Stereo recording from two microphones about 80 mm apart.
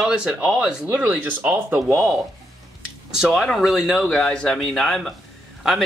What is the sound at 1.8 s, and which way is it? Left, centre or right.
Speech, right.